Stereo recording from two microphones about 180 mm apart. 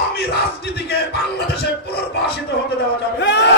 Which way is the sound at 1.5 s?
60° left (ahead or behind).